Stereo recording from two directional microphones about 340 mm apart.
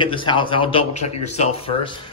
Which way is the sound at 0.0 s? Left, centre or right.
Centre.